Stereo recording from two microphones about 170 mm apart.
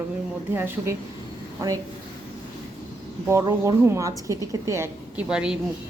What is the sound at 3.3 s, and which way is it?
Speech, 15° right (ahead or behind).